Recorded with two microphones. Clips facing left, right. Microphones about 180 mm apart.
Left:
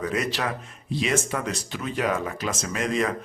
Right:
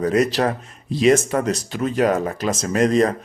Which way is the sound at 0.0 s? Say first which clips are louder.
Right 9 dB; 40° right (ahead or behind).